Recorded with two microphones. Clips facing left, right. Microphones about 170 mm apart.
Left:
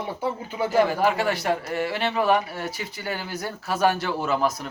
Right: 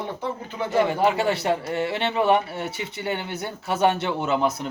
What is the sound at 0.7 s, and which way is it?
Speech, 25° right (ahead or behind).